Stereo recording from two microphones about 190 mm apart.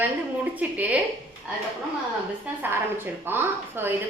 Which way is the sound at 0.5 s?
10° right (ahead or behind).